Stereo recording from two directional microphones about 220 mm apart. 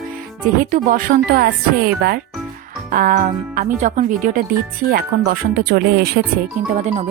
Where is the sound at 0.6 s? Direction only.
40° right (ahead or behind).